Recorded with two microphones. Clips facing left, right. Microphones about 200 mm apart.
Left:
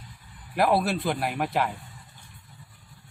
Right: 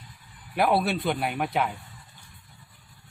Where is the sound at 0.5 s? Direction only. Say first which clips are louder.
Even; centre (ahead or behind).